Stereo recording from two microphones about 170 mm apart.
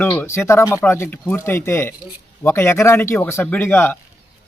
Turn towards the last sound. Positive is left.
turn(degrees=10)  # may be behind; listen again after turning